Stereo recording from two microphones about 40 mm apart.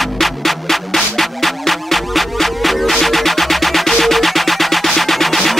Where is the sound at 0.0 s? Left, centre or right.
Centre.